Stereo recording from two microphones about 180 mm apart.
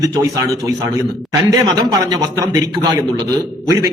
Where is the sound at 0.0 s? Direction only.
20° right (ahead or behind).